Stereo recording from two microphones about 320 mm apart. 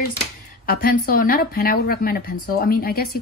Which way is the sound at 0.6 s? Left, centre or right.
Left.